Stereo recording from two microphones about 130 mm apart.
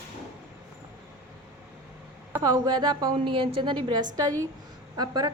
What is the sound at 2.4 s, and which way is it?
A woman's voice, 35° right (ahead or behind).